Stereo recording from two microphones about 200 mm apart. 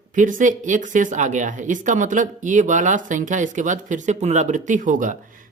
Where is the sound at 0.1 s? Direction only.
40° right (ahead or behind).